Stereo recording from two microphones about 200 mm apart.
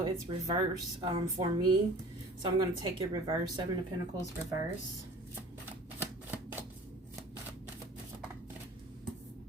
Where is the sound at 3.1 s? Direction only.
20° right (ahead or behind).